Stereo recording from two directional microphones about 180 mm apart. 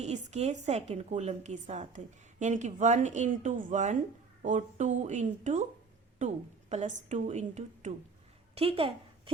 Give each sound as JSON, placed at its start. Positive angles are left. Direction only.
{"t": 0.0, "sound": "a woman's voice", "side_deg": -40}